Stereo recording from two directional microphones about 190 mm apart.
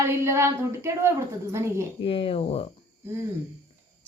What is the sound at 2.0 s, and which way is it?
Speech, 30° left (ahead or behind).